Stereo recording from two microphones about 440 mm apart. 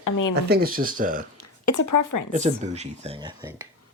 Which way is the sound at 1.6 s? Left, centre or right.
Left.